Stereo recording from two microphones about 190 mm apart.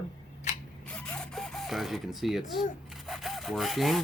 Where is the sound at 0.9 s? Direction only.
5° left (ahead or behind).